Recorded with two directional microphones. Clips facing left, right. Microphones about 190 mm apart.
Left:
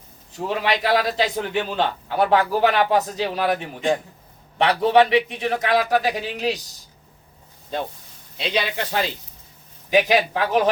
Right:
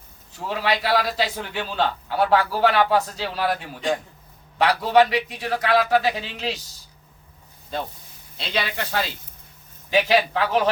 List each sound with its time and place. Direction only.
0.3 s a man's voice: 20° left (ahead or behind)
8.4 s a man's voice: 15° left (ahead or behind)